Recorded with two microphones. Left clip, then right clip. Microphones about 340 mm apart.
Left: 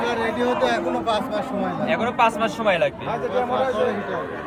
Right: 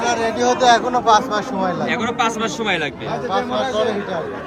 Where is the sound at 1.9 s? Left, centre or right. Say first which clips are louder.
Even; centre.